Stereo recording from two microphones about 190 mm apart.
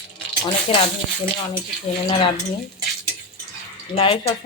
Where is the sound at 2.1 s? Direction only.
30° left (ahead or behind).